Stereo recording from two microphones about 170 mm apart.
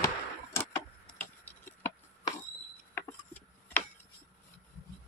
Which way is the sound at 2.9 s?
10° left (ahead or behind).